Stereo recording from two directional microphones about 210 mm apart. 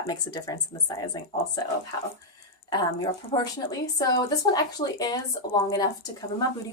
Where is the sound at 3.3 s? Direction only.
25° left (ahead or behind).